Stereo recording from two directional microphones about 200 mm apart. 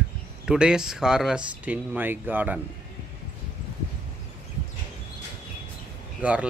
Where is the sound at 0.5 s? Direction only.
5° right (ahead or behind).